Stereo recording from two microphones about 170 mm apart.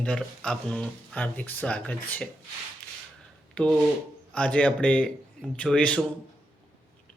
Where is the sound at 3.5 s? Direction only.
5° left (ahead or behind).